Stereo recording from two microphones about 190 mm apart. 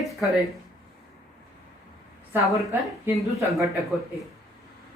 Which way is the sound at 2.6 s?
Centre (ahead or behind).